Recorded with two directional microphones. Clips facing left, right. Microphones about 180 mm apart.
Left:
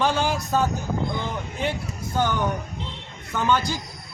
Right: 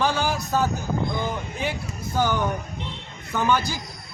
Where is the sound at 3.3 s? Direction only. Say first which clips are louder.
Even; 10° right (ahead or behind).